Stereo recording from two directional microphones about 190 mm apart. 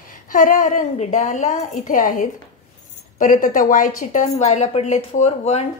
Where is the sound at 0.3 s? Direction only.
45° left (ahead or behind).